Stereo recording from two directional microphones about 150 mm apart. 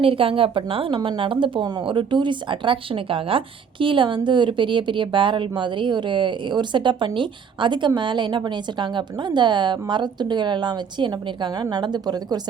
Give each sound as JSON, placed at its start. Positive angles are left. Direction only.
{"t": 0.0, "sound": "a woman's voice", "side_deg": -35}